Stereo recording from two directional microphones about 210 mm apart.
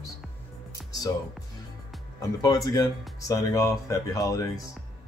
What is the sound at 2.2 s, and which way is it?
Speech, 15° left (ahead or behind).